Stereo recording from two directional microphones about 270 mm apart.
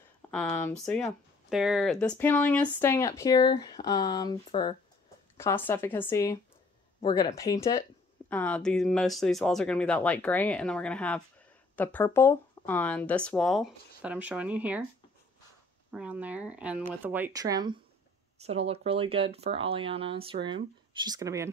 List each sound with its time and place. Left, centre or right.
0.3 s speech: centre
15.9 s speech: centre